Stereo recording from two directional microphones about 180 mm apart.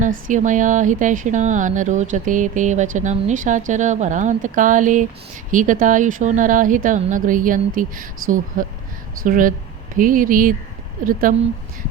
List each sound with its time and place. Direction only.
0.3 s speech: 45° right (ahead or behind)